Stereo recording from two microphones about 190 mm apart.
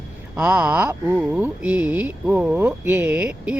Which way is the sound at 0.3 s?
5° right (ahead or behind).